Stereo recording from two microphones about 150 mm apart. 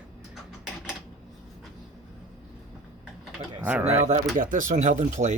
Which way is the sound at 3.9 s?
45° right (ahead or behind).